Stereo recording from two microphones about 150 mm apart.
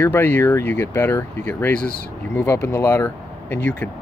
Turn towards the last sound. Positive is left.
turn(degrees=15)  # may be behind; listen again after turning